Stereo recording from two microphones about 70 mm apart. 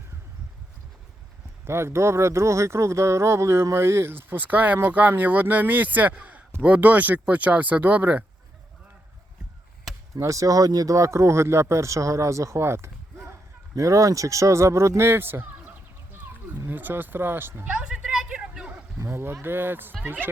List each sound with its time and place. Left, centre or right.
1.6 s speech: right
10.2 s speech: right
16.6 s speech: right
17.7 s a sound: centre
19.0 s speech: right